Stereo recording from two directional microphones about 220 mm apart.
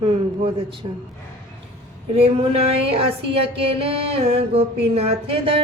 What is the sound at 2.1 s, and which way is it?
Speech, 25° right (ahead or behind).